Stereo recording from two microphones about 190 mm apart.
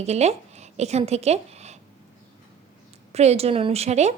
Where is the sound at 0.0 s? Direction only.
35° right (ahead or behind).